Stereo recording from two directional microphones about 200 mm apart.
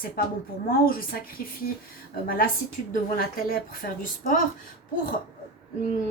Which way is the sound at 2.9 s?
45° left (ahead or behind).